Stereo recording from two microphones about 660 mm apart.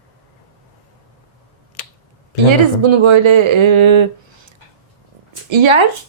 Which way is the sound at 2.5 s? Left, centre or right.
Right.